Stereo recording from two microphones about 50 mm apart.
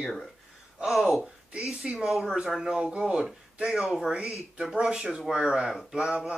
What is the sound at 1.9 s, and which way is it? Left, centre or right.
Speech, centre.